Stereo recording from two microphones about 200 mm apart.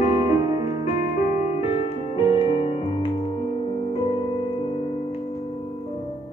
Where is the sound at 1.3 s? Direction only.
35° left (ahead or behind).